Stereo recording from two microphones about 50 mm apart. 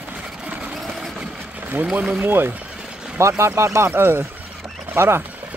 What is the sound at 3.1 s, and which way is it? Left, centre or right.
Speech, right.